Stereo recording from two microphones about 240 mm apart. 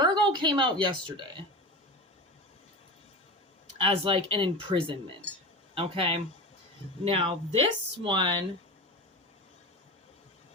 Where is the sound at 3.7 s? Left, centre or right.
Right.